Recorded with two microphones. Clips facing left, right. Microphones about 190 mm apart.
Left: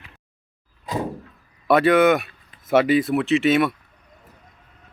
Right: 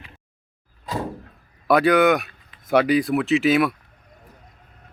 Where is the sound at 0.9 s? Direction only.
15° left (ahead or behind).